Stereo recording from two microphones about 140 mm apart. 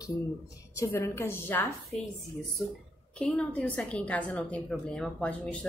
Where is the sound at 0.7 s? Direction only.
20° left (ahead or behind).